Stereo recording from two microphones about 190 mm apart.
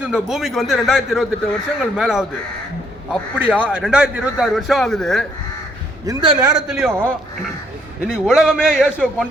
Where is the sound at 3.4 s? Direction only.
10° right (ahead or behind).